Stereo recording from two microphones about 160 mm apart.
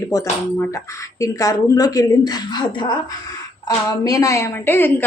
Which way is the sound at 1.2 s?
20° left (ahead or behind).